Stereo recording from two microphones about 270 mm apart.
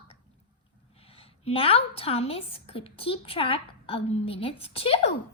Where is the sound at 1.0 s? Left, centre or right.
Left.